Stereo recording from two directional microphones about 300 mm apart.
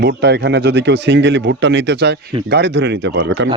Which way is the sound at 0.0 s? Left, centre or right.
Right.